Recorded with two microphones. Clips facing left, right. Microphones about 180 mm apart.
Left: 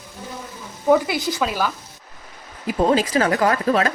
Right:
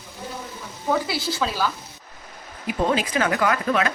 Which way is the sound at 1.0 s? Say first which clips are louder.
Left 3 dB; 15° left (ahead or behind).